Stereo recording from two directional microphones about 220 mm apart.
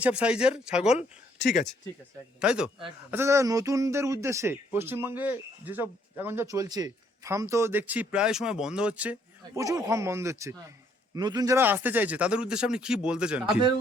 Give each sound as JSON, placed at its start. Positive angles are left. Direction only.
{"t": 0.0, "sound": "speech", "side_deg": -5}
{"t": 2.4, "sound": "speech", "side_deg": -5}